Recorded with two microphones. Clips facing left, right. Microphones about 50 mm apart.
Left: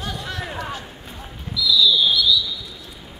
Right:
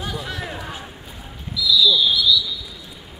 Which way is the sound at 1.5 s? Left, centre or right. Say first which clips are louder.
Even; centre.